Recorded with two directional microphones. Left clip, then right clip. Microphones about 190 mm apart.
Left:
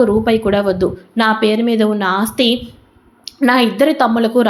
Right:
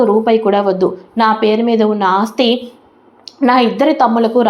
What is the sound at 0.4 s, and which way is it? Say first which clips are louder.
A woman's voice: right 2 dB; 40° left (ahead or behind).